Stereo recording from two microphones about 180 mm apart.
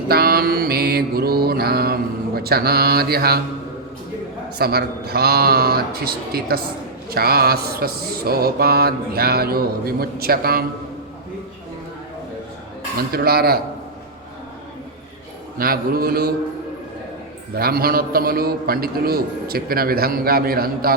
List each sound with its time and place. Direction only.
0.1 s mantra: 60° right (ahead or behind)
4.5 s mantra: 60° right (ahead or behind)
13.0 s mantra: 55° right (ahead or behind)
15.5 s mantra: 55° right (ahead or behind)
17.5 s mantra: 55° right (ahead or behind)